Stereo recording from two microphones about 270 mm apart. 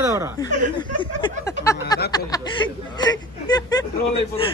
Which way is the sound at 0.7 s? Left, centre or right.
Centre.